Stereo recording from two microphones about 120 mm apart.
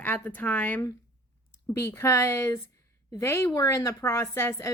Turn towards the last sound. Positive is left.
turn(degrees=20)  # may be behind; listen again after turning